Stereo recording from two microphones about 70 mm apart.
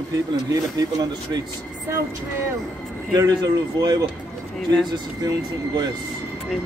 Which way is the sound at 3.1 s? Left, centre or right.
Right.